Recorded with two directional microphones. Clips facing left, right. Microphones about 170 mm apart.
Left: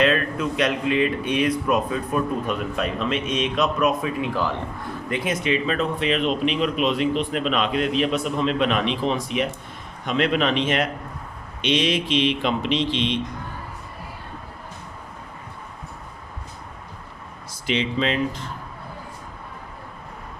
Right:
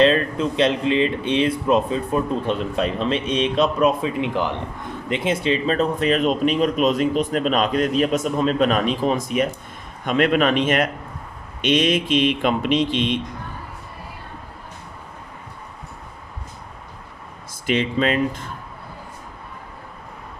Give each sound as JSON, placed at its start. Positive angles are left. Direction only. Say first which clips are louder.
{"t": 0.0, "sound": "speech", "louder": "right 4 dB", "side_deg": -30}
{"t": 17.5, "sound": "speech", "louder": "right 3 dB", "side_deg": -50}